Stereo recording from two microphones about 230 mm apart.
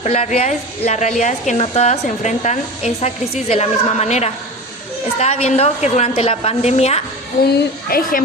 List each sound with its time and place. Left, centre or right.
0.0 s a woman's voice: left
7.4 s a woman's voice: left